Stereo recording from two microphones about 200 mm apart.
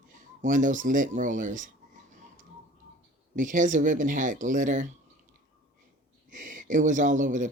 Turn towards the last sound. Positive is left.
turn(degrees=-40)  # may be behind; listen again after turning